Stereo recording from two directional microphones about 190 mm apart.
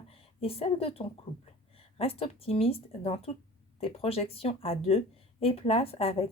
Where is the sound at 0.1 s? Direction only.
30° left (ahead or behind).